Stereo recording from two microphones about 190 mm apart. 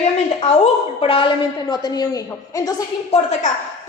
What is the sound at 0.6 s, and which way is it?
A woman's voice, 25° left (ahead or behind).